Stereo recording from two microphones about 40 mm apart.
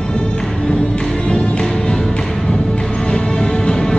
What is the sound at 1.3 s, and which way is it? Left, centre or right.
Music, left.